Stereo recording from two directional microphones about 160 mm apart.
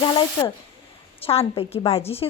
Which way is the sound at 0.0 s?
30° left (ahead or behind).